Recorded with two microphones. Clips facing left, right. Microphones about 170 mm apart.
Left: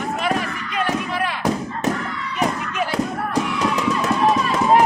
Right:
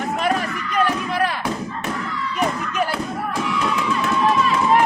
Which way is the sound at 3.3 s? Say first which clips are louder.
Right 1 dB; 40° left (ahead or behind).